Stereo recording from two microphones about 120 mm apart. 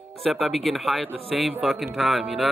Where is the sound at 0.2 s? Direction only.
Centre (ahead or behind).